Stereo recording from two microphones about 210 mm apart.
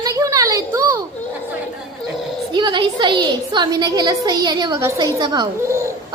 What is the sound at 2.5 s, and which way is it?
A woman's voice, 20° right (ahead or behind).